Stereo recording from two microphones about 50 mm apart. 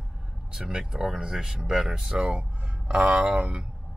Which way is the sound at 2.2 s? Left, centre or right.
Centre.